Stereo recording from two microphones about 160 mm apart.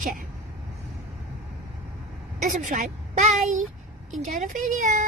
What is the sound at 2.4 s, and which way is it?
Speech, 60° right (ahead or behind).